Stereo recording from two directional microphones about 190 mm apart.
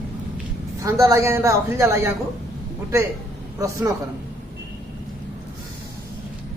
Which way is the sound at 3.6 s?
15° right (ahead or behind).